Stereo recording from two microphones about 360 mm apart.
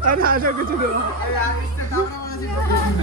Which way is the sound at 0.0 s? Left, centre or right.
Right.